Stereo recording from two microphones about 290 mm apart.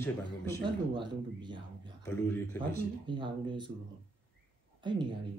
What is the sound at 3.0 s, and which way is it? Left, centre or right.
Speech, centre.